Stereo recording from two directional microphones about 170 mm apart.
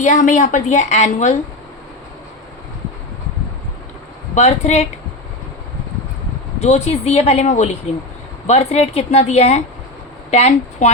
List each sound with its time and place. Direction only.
0.0 s a woman's voice: 45° left (ahead or behind)
4.4 s speech: 40° left (ahead or behind)
6.6 s speech: 40° left (ahead or behind)